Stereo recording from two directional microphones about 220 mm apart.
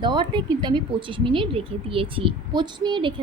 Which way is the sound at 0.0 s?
20° right (ahead or behind).